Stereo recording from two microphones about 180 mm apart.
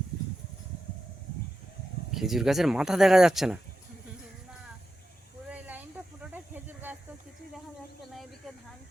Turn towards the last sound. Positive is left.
turn(degrees=-10)  # may be behind; listen again after turning